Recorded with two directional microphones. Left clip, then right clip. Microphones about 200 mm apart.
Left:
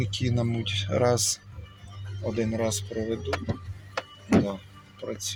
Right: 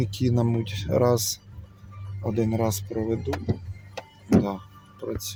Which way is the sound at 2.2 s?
10° right (ahead or behind).